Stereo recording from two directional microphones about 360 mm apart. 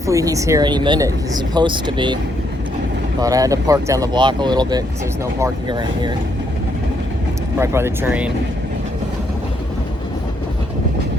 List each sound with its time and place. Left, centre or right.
0.1 s speech: centre
3.2 s speech: centre
7.6 s speech: centre